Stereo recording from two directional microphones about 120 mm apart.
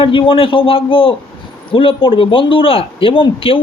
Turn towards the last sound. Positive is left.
turn(degrees=50)  # may be behind; listen again after turning